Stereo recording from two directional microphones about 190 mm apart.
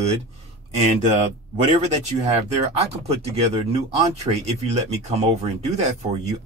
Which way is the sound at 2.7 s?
35° right (ahead or behind).